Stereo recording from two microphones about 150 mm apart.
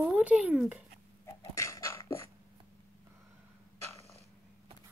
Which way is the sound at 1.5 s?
20° left (ahead or behind).